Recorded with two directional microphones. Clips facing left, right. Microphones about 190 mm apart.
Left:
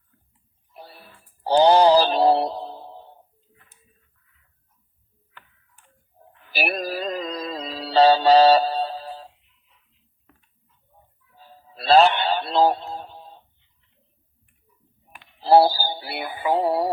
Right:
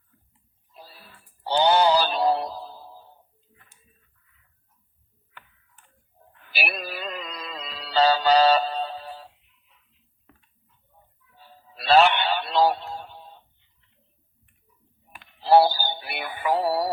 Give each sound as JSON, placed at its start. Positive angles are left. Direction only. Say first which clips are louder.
{"t": 0.7, "sound": "a sound", "louder": "left 4 dB", "side_deg": 60}
{"t": 1.5, "sound": "synthetic singing", "louder": "left 5 dB", "side_deg": 35}
{"t": 6.6, "sound": "music", "louder": "left 6 dB", "side_deg": 40}
{"t": 11.7, "sound": "synthetic singing", "louder": "left 2 dB", "side_deg": 35}
{"t": 15.5, "sound": "synthetic singing", "louder": "left 2 dB", "side_deg": 30}